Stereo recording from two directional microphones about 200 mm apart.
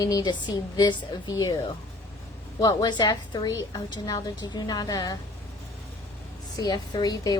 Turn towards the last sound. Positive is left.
turn(degrees=20)  # may be behind; listen again after turning